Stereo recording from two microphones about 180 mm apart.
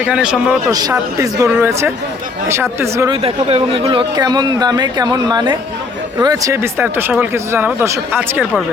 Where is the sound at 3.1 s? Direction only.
30° right (ahead or behind); by 8.6 s 10° right (ahead or behind).